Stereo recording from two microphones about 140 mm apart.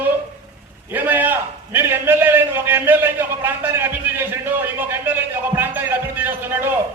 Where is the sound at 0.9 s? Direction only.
15° right (ahead or behind).